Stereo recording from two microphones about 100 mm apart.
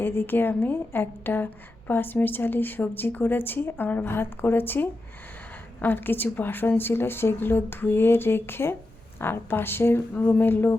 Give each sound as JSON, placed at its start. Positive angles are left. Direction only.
{"t": 0.0, "sound": "a woman's voice", "side_deg": 20}